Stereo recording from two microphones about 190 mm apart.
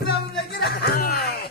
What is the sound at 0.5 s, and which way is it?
Music, 55° left (ahead or behind).